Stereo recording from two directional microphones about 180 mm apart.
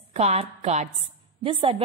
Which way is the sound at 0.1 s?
35° right (ahead or behind).